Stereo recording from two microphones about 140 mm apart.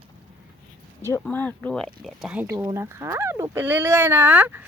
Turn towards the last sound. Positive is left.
turn(degrees=-10)  # may be behind; listen again after turning